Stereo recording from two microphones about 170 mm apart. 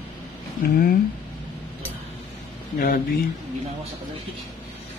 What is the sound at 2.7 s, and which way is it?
Speech, 55° left (ahead or behind).